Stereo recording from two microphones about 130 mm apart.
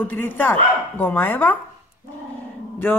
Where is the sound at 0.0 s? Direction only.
15° left (ahead or behind).